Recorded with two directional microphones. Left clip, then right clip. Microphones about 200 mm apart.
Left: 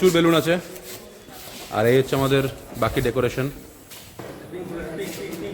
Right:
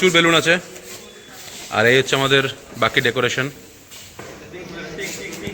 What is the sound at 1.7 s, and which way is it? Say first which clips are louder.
A man's voice: right 4 dB; 5° left (ahead or behind).